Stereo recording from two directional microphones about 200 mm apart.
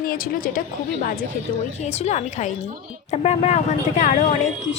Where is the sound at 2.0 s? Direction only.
35° left (ahead or behind).